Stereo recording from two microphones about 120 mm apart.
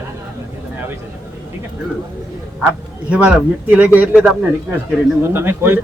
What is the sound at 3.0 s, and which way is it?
Speech, 10° right (ahead or behind).